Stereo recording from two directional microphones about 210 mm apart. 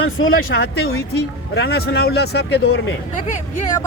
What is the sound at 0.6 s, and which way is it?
Speech, 50° left (ahead or behind).